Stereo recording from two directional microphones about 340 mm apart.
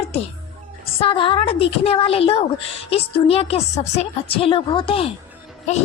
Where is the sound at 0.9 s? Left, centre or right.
Centre.